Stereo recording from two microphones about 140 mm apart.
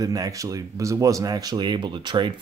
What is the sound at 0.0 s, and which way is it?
Speech, 25° right (ahead or behind).